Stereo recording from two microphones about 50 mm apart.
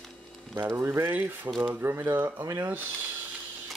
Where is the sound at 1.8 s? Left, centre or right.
Right.